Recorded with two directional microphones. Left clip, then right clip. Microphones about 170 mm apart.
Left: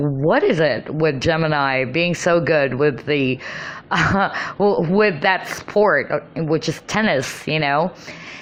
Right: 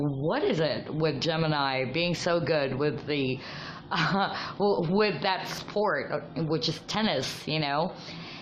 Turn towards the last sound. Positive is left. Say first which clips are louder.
# left 10 dB
turn(degrees=30)  # may be behind; listen again after turning